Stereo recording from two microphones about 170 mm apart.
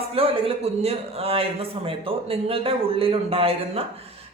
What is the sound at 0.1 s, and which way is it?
Speech, 35° right (ahead or behind).